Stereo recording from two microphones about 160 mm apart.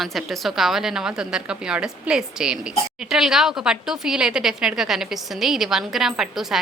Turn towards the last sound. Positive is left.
turn(degrees=0)  # may be behind; listen again after turning